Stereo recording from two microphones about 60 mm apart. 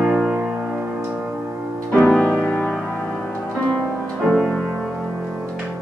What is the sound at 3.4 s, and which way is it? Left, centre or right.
Music, left.